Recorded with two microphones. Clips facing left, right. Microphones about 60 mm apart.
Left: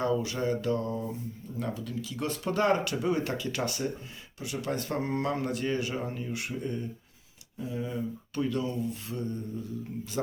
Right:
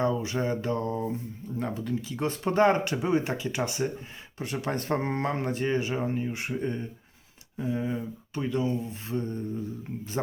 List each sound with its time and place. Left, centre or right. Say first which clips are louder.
0.0 s speech: right 1 dB; right
4.4 s speech: right 2 dB; right
8.4 s speech: right 2 dB; right